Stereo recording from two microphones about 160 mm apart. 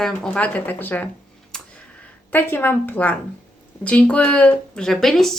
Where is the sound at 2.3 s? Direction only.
10° left (ahead or behind).